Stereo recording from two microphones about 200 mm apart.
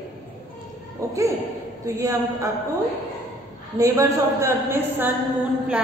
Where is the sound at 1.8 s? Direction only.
15° right (ahead or behind).